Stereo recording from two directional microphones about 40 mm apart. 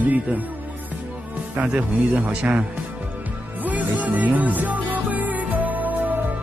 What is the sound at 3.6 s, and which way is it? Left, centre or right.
Music, right.